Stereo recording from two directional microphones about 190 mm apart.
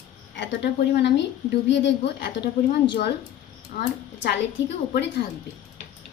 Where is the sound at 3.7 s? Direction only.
45° left (ahead or behind).